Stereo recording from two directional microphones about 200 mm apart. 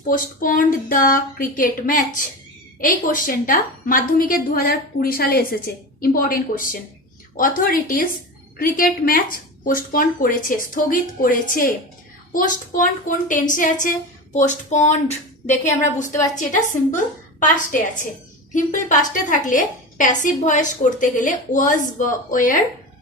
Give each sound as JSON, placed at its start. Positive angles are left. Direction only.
{"t": 0.1, "sound": "a woman's voice", "side_deg": 45}
{"t": 17.7, "sound": "a woman's voice", "side_deg": 40}